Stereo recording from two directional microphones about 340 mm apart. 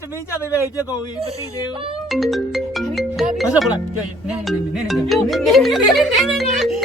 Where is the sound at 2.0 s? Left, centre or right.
Centre.